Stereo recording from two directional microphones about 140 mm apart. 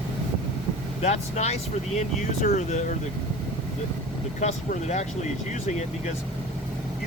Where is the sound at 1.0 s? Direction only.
50° left (ahead or behind).